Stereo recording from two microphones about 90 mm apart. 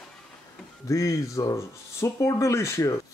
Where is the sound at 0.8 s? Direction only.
35° left (ahead or behind).